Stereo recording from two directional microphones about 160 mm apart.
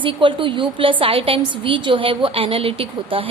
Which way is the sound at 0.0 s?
30° right (ahead or behind).